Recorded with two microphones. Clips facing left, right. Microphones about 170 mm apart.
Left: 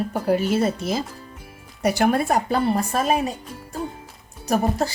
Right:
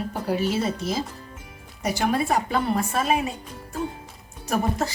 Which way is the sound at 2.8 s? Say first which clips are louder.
Left 2 dB; 40° left (ahead or behind).